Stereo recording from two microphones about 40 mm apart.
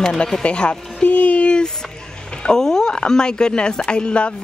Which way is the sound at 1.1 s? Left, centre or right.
Left.